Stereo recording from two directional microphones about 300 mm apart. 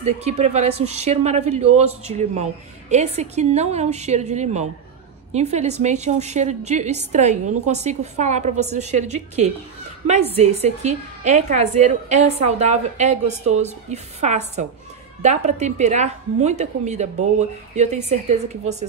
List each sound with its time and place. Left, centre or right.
0.0 s a woman's voice: right